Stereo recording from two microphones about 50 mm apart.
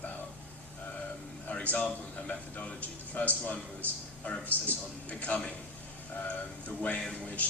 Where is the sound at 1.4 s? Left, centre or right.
Left.